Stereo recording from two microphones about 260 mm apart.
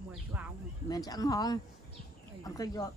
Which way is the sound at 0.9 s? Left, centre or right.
Centre.